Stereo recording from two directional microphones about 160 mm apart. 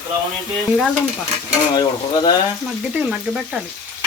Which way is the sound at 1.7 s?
25° left (ahead or behind).